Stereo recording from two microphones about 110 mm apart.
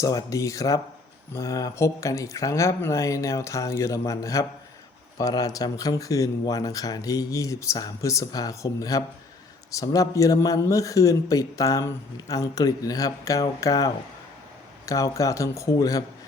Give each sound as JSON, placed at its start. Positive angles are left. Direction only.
{"t": 0.0, "sound": "speech", "side_deg": 30}